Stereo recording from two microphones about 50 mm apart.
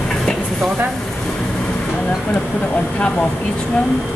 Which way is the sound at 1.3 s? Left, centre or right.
Centre.